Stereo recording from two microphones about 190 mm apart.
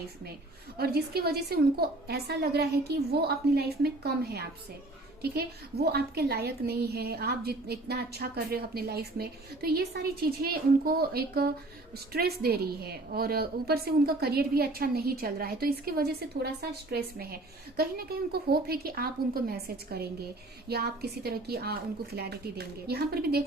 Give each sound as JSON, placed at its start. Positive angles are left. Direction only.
{"t": 0.8, "sound": "a woman's voice", "side_deg": -55}